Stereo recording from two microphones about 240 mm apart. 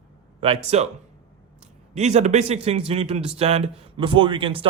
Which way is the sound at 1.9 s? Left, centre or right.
Right.